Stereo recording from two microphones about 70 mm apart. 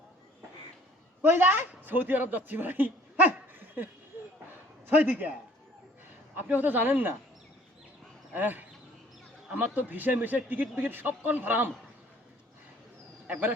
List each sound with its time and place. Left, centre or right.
1.2 s a woman's voice: right
4.9 s a man's voice: right
6.3 s a man's voice: right
8.3 s a man's voice: right
13.2 s speech: right